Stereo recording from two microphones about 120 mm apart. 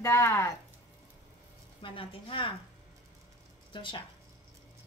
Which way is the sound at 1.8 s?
45° left (ahead or behind).